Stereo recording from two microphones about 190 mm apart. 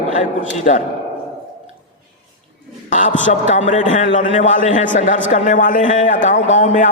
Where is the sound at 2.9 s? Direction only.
40° left (ahead or behind).